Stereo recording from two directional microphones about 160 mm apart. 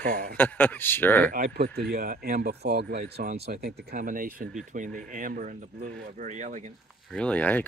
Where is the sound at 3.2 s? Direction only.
60° right (ahead or behind).